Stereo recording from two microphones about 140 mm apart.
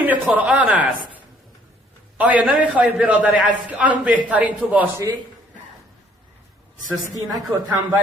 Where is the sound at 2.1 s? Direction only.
10° right (ahead or behind).